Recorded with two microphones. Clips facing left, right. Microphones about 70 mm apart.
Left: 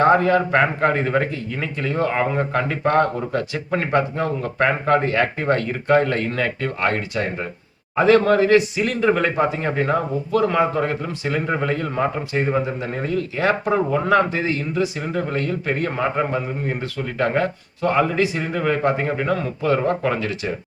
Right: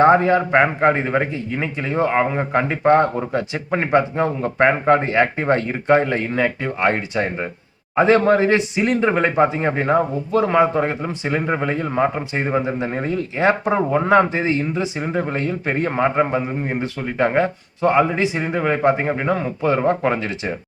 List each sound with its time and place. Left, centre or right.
0.0 s a man's voice: right